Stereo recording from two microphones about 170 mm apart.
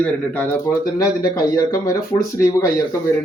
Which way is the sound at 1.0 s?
20° left (ahead or behind).